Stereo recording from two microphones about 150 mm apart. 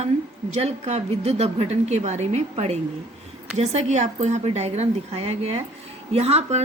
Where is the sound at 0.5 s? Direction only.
50° right (ahead or behind).